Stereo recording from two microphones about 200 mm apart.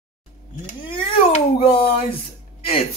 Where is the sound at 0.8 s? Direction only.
30° left (ahead or behind).